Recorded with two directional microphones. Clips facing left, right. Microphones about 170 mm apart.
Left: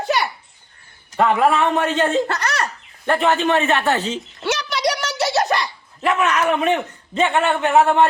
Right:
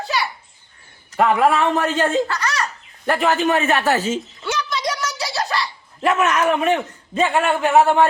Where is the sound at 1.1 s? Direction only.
5° right (ahead or behind).